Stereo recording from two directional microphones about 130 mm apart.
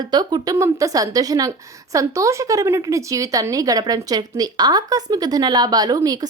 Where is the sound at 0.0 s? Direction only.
30° right (ahead or behind).